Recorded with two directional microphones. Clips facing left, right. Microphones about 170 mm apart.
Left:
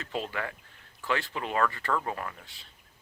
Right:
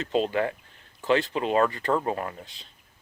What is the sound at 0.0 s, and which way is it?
Speech, 20° right (ahead or behind).